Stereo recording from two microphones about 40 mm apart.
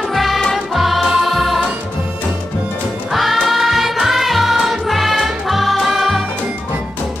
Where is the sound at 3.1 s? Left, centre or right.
Centre.